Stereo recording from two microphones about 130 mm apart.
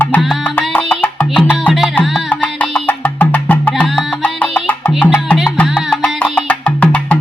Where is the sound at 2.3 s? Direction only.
10° left (ahead or behind).